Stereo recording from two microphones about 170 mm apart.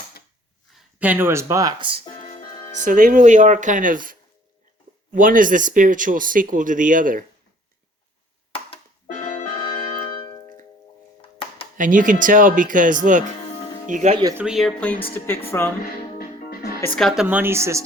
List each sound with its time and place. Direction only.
0.7 s speech: 10° right (ahead or behind); by 2.0 s 25° right (ahead or behind)
2.8 s speech: 50° right (ahead or behind)
11.8 s speech: 50° right (ahead or behind)
14.3 s speech: 5° right (ahead or behind)
15.4 s speech: 15° left (ahead or behind)
16.1 s music: 65° left (ahead or behind)
16.8 s speech: 5° left (ahead or behind)
17.2 s speech: 10° right (ahead or behind)